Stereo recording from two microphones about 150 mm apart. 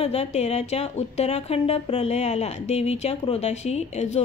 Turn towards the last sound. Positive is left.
turn(degrees=50)  # may be behind; listen again after turning